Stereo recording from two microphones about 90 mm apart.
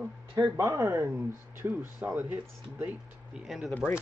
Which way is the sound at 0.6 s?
35° right (ahead or behind).